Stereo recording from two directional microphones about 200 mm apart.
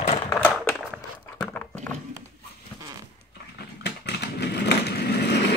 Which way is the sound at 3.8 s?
55° left (ahead or behind).